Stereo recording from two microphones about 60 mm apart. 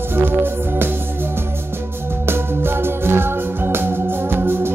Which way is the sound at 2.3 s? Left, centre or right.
Right.